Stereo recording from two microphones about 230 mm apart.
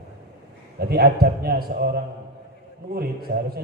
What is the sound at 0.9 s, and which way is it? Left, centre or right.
A man's voice, right.